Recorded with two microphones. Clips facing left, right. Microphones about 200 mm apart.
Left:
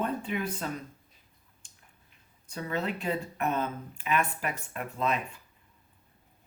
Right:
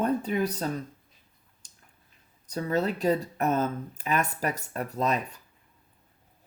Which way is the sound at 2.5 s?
40° right (ahead or behind).